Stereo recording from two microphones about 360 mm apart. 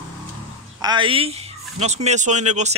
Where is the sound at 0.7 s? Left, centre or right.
Centre.